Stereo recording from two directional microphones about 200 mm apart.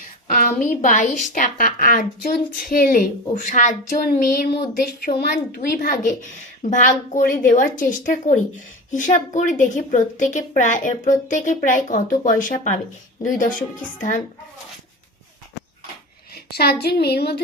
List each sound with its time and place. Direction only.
0.0 s a woman's voice: 40° left (ahead or behind)
16.3 s a sound: 50° left (ahead or behind)
16.8 s a child's voice: 55° left (ahead or behind)